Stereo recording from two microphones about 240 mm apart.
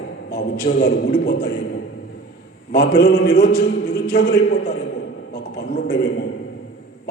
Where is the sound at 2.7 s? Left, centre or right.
Left.